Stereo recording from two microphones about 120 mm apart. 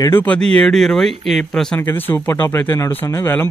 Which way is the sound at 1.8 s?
20° left (ahead or behind).